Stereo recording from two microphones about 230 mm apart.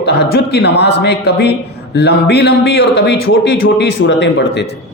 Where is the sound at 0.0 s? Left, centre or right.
Left.